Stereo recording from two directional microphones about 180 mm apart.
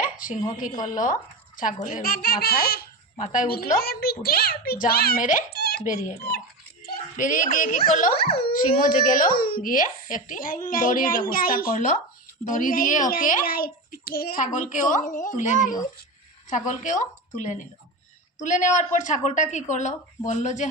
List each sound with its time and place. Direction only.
0.0 s a sound: 50° left (ahead or behind)
0.5 s speech: 50° left (ahead or behind)
3.2 s a woman's voice: 40° left (ahead or behind)
3.8 s speech: 60° left (ahead or behind)
6.8 s a woman's voice: 45° left (ahead or behind)